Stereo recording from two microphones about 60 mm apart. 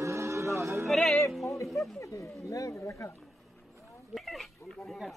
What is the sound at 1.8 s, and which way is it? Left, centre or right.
Speech, left.